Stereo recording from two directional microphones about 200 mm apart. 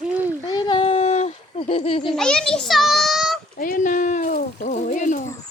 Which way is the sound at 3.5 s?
40° left (ahead or behind).